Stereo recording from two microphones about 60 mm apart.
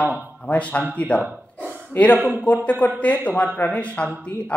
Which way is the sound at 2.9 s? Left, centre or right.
Left.